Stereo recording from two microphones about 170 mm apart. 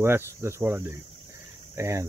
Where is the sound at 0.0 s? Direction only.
15° right (ahead or behind).